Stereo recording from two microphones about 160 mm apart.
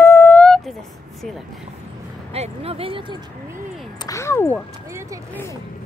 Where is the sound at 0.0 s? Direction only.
15° left (ahead or behind).